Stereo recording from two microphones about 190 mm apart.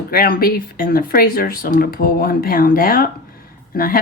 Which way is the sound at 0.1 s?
50° left (ahead or behind).